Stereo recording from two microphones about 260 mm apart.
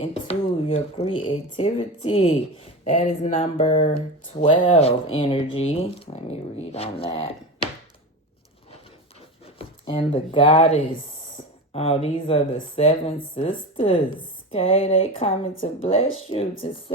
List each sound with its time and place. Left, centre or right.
0.0 s speech: left
9.6 s speech: left